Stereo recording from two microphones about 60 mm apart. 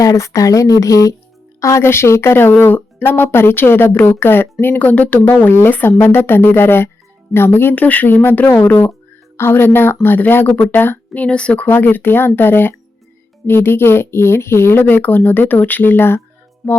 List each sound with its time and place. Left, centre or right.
0.0 s speech: left
1.8 s speech: left
4.8 s speech: left